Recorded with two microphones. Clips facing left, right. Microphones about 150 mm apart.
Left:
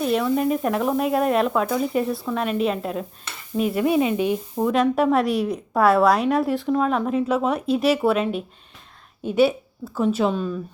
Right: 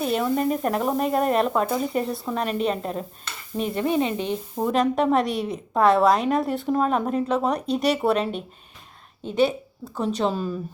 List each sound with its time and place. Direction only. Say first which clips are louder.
0.3 s a woman's voice: left 2 dB; 5° left (ahead or behind)
4.5 s a woman's voice: left 1 dB; centre (ahead or behind)
9.2 s a woman's voice: left 3 dB; 10° left (ahead or behind)
10.3 s a woman's voice: left 2 dB; 5° right (ahead or behind)